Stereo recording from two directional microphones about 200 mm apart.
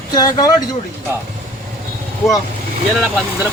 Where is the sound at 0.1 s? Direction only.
20° left (ahead or behind).